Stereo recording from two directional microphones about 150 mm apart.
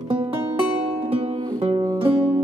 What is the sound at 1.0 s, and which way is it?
Music, 40° right (ahead or behind).